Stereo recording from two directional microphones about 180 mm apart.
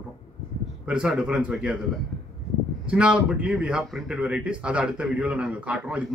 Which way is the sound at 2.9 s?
5° right (ahead or behind).